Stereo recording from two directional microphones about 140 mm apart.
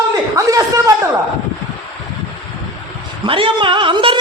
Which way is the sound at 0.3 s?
25° right (ahead or behind).